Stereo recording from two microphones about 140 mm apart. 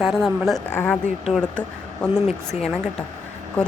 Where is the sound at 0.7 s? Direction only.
10° left (ahead or behind).